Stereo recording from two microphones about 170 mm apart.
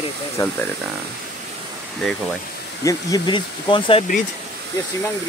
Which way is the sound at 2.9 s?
20° left (ahead or behind).